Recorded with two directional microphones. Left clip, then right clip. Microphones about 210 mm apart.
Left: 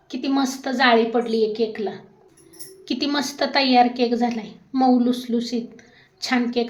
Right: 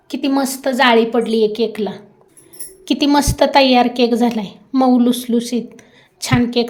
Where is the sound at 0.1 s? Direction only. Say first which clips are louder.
Right 5 dB; 45° right (ahead or behind).